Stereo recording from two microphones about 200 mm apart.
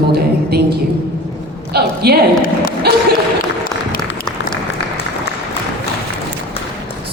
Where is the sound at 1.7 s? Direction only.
50° right (ahead or behind).